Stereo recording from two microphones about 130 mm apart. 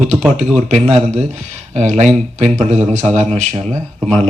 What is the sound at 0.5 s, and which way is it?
Speech, 60° right (ahead or behind).